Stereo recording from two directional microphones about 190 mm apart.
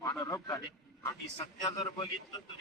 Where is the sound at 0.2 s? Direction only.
20° left (ahead or behind).